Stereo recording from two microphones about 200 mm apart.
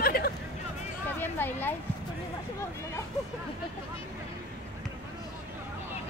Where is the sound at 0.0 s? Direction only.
50° left (ahead or behind).